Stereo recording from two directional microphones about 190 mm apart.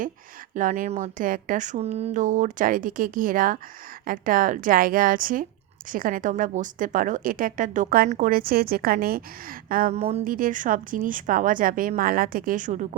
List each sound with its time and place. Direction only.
0.5 s speech: 45° right (ahead or behind)
9.9 s speech: 35° right (ahead or behind)
10.3 s speech: 45° right (ahead or behind)